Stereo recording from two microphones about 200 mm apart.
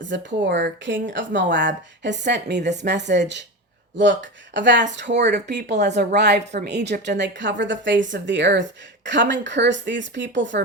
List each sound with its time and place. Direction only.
0.0 s a woman's voice: 65° right (ahead or behind)